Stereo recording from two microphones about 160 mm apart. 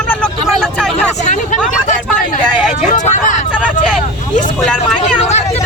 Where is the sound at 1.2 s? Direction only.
50° left (ahead or behind).